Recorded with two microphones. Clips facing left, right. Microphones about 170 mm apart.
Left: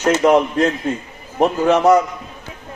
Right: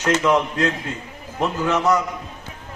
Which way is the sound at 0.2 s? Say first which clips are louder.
Left 5 dB; 45° left (ahead or behind).